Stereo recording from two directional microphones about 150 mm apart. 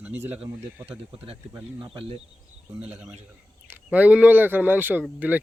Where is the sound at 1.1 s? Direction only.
35° right (ahead or behind).